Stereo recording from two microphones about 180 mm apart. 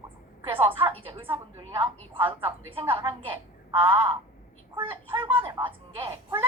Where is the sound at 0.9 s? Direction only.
30° right (ahead or behind).